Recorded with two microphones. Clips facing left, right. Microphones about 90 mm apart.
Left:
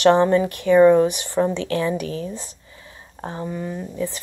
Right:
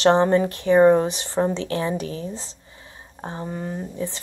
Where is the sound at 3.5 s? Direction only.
40° right (ahead or behind).